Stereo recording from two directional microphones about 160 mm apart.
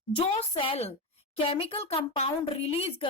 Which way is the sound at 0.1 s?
35° left (ahead or behind).